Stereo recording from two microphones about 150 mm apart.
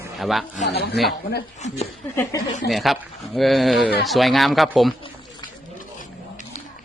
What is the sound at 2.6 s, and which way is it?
Speech, centre (ahead or behind).